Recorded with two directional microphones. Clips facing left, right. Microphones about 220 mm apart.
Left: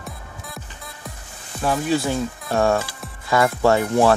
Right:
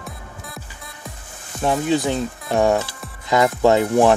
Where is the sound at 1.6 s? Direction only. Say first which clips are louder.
Right 2 dB; 20° right (ahead or behind).